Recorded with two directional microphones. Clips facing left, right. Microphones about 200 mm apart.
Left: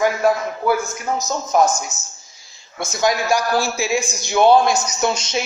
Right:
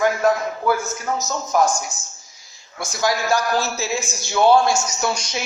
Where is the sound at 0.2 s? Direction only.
10° left (ahead or behind).